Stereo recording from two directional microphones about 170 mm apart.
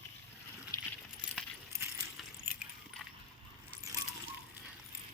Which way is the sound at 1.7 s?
15° right (ahead or behind).